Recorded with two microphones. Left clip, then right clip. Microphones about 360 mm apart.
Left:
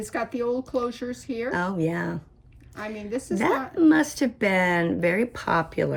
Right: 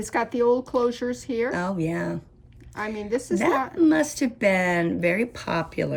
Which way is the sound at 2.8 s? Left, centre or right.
Centre.